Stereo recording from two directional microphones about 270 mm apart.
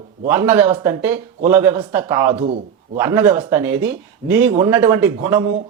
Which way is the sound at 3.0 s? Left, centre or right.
Centre.